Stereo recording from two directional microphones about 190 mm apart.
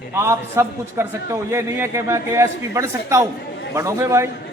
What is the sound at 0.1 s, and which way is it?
A man's voice, 15° right (ahead or behind).